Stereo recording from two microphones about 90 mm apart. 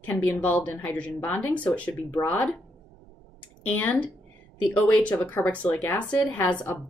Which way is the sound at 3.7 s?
15° left (ahead or behind).